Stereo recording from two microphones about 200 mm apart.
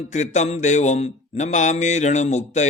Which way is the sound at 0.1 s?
35° left (ahead or behind).